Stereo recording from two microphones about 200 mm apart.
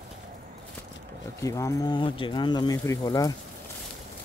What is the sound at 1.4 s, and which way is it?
Speech, 15° left (ahead or behind).